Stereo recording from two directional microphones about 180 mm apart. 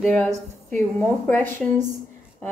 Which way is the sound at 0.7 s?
10° left (ahead or behind).